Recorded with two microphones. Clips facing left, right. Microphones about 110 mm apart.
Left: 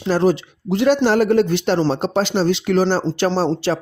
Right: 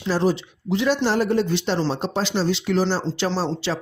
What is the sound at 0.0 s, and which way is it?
A man's voice, 55° left (ahead or behind).